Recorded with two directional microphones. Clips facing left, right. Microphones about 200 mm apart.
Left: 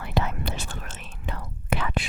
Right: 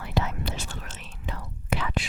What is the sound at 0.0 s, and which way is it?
Whispering, 55° left (ahead or behind).